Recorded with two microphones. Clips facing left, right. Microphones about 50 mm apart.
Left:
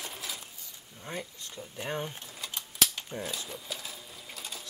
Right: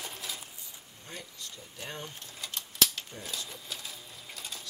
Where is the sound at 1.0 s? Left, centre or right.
Left.